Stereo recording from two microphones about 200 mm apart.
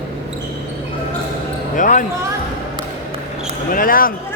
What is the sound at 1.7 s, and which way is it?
Basketball bounce, 40° left (ahead or behind).